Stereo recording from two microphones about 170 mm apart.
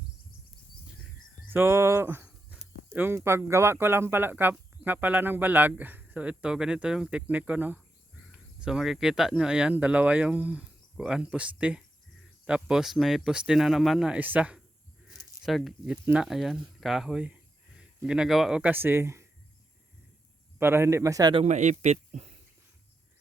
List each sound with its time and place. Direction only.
1.5 s speech: 15° right (ahead or behind)
15.0 s a sound: centre (ahead or behind)
16.0 s speech: 5° right (ahead or behind)
20.6 s speech: 15° right (ahead or behind)
21.4 s speech: 45° right (ahead or behind)